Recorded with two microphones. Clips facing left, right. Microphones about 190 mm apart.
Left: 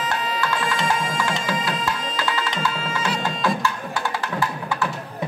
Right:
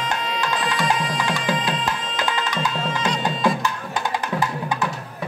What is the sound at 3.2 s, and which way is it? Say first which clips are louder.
Music: right 2 dB; 15° right (ahead or behind).